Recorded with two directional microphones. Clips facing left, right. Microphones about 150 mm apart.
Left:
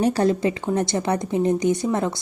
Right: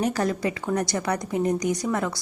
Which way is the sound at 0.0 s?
30° left (ahead or behind).